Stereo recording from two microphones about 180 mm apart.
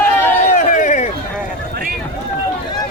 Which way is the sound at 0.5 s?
45° left (ahead or behind).